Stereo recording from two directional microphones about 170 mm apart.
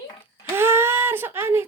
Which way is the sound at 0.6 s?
15° right (ahead or behind).